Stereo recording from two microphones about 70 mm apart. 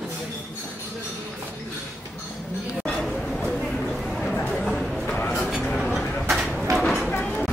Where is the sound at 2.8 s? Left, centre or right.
Centre.